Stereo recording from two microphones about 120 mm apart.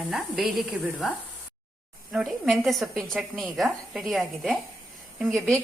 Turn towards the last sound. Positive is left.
turn(degrees=0)  # may be behind; listen again after turning